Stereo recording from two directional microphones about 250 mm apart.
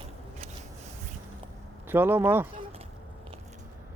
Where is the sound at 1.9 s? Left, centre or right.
Centre.